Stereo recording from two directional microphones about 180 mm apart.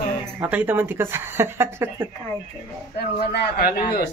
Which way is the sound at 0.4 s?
10° right (ahead or behind).